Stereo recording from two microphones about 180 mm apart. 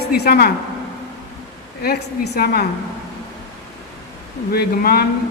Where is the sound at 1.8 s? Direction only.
60° left (ahead or behind).